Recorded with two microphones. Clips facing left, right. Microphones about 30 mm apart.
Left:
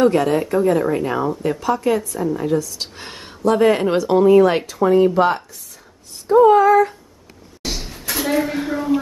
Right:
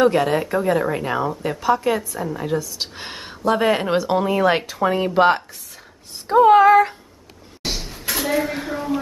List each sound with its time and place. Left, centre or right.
0.0 s a woman's voice: centre
5.1 s speech: right
6.2 s a sound: right
8.1 s a woman's voice: centre